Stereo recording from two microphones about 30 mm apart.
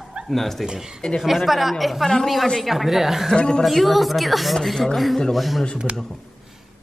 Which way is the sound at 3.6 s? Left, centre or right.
Centre.